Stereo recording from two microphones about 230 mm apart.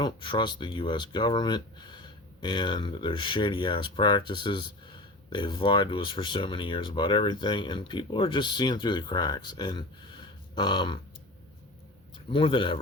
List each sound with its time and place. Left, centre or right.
0.0 s speech: centre
12.3 s speech: left